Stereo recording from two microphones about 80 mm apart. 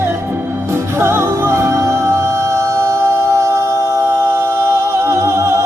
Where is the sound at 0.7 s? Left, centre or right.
Right.